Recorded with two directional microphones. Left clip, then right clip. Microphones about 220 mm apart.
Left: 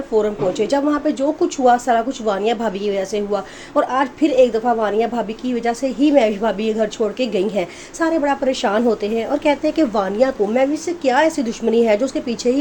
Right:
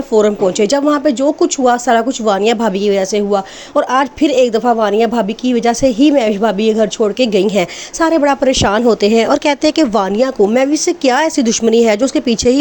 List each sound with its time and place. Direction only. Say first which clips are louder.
0.1 s speech: right 6 dB; 35° right (ahead or behind)